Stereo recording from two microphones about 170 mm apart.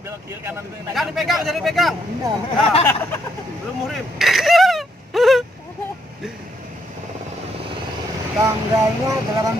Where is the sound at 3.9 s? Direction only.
Centre (ahead or behind).